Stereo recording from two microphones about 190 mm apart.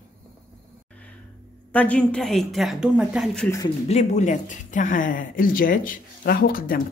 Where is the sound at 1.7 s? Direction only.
10° left (ahead or behind).